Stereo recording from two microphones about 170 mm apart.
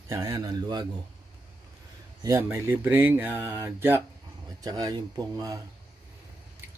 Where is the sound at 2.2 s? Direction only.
15° right (ahead or behind).